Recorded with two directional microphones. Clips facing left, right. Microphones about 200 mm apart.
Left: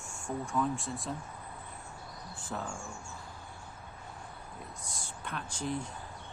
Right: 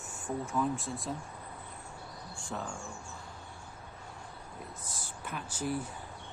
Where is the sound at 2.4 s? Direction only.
5° left (ahead or behind).